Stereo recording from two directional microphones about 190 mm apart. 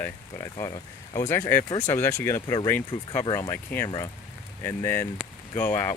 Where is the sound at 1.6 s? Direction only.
25° left (ahead or behind).